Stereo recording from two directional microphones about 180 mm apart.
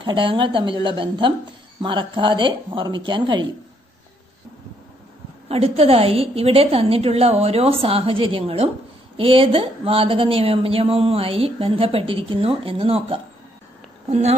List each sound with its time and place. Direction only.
0.0 s a woman's voice: 25° right (ahead or behind)
5.5 s a woman's voice: 35° right (ahead or behind)